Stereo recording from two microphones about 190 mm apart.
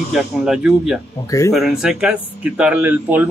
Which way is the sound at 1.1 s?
15° left (ahead or behind).